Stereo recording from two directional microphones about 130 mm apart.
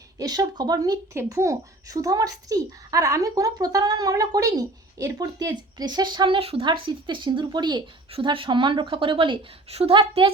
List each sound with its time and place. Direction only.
0.2 s speech: 30° right (ahead or behind)